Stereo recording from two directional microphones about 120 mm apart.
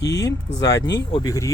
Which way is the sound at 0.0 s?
30° left (ahead or behind).